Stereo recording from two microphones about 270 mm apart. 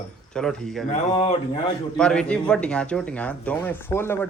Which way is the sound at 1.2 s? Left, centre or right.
Left.